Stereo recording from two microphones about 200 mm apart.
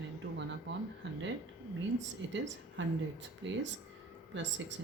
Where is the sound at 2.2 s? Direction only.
65° right (ahead or behind).